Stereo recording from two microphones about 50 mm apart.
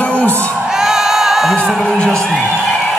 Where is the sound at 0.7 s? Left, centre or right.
Centre.